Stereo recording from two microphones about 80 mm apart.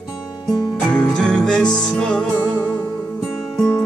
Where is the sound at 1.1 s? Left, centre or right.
Centre.